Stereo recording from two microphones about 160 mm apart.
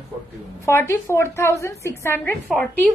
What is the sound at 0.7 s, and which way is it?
A woman's voice, 15° left (ahead or behind).